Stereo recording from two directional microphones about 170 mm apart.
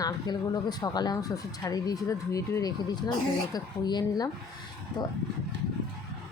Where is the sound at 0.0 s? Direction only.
25° left (ahead or behind).